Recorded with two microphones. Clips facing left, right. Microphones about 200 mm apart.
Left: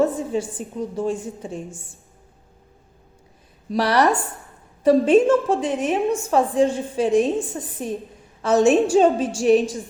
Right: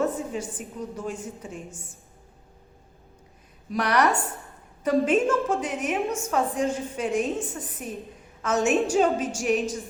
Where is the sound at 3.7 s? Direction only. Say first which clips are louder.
Left 4 dB; 30° left (ahead or behind).